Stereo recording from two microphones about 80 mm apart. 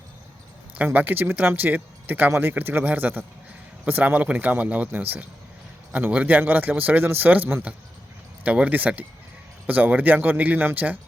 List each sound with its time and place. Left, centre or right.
0.9 s speech: right